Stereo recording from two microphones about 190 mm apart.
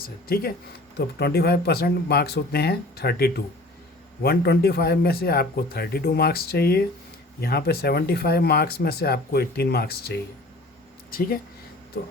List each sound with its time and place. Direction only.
0.0 s speech: 50° left (ahead or behind)